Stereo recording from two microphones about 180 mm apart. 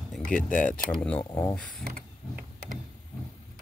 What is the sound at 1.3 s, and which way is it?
Speech, 20° left (ahead or behind).